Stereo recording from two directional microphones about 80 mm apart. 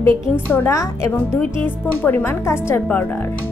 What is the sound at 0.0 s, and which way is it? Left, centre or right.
A woman's voice, left.